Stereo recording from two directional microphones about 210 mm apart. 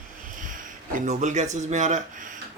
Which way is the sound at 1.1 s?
35° right (ahead or behind).